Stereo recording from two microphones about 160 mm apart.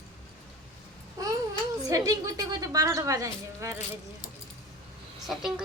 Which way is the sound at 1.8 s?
20° right (ahead or behind).